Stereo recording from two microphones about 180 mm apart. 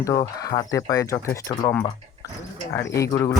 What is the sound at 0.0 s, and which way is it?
Speech, 15° left (ahead or behind).